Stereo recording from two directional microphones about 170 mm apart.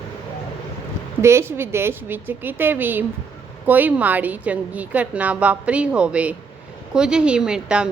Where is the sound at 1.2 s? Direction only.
15° right (ahead or behind).